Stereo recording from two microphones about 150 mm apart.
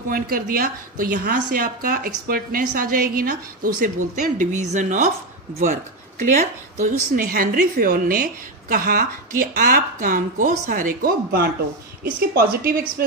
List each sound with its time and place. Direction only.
0.1 s a woman's voice: 75° right (ahead or behind); by 13.0 s 90° right